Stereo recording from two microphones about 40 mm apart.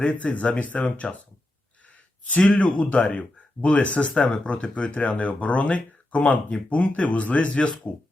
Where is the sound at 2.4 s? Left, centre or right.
Left.